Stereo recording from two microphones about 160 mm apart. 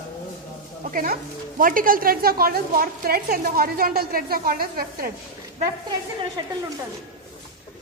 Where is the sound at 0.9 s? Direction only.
60° right (ahead or behind).